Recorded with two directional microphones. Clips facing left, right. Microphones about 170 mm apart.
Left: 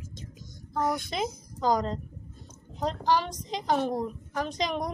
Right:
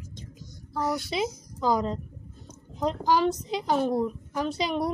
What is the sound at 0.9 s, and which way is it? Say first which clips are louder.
Speech: right 1 dB; 50° left (ahead or behind).